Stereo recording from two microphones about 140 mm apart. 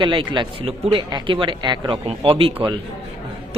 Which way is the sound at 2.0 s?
45° right (ahead or behind).